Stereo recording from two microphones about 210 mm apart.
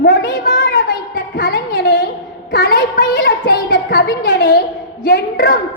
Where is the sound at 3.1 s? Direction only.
60° left (ahead or behind).